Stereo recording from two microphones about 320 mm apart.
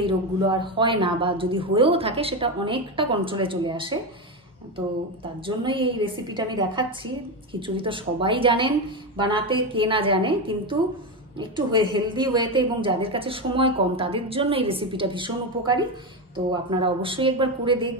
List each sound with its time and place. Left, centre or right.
0.0 s a woman's voice: centre
5.4 s a woman's voice: centre